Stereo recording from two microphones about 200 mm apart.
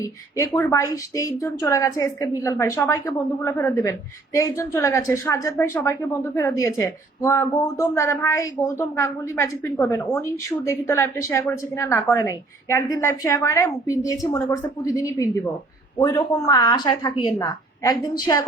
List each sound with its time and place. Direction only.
0.5 s a woman's voice: 15° left (ahead or behind)